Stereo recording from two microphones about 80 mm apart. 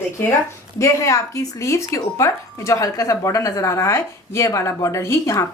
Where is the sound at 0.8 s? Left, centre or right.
Left.